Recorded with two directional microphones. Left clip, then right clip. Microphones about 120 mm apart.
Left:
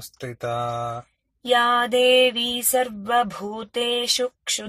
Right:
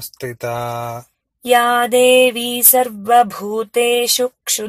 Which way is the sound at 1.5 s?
Centre (ahead or behind).